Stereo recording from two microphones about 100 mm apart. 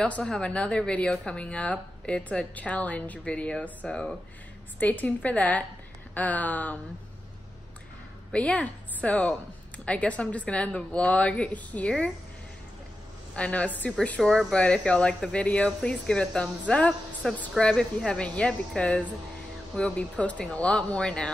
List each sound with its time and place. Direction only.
0.0 s speech: 10° left (ahead or behind)
8.3 s a woman's voice: 10° left (ahead or behind)
13.4 s speech: 15° left (ahead or behind)